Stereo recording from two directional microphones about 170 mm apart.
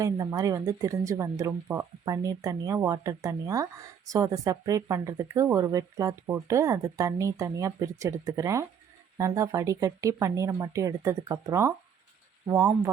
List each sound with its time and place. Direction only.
0.0 s speech: 20° right (ahead or behind)